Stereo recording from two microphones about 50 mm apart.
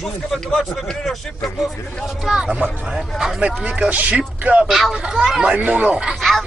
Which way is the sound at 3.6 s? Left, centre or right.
Right.